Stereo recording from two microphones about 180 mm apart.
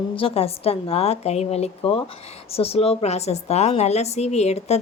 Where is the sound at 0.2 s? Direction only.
30° left (ahead or behind).